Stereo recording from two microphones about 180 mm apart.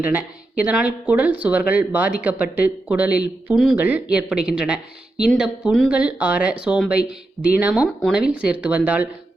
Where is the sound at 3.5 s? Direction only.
5° right (ahead or behind).